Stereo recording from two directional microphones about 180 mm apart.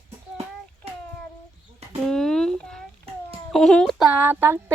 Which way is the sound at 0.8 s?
35° right (ahead or behind).